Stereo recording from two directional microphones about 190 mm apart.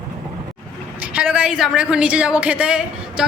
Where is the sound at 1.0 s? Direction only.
5° right (ahead or behind).